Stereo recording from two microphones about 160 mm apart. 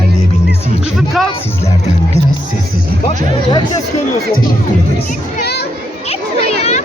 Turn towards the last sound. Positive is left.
turn(degrees=45)  # may be behind; listen again after turning